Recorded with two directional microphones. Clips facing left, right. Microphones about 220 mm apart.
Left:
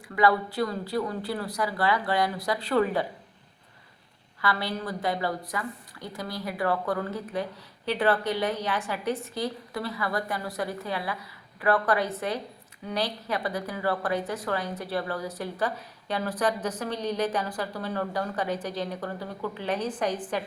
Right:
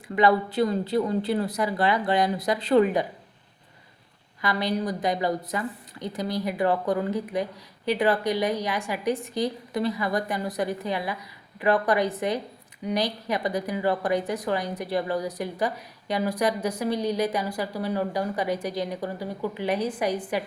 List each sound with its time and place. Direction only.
0.2 s a woman's voice: 20° right (ahead or behind)
4.4 s speech: 15° right (ahead or behind)